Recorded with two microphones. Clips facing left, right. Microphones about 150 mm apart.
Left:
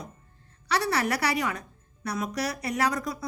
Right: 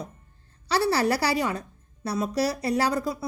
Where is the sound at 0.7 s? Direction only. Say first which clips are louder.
Right 4 dB; 30° right (ahead or behind).